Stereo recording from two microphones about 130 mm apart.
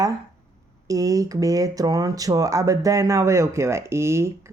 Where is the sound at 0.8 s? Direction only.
25° right (ahead or behind).